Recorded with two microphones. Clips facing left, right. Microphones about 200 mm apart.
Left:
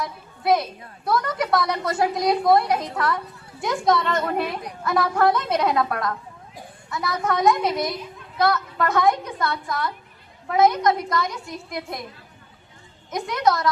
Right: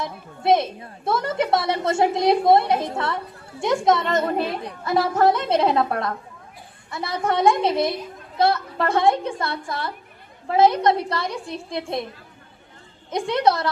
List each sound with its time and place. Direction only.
0.0 s a woman's voice: 25° right (ahead or behind)
13.1 s a woman's voice: 30° right (ahead or behind)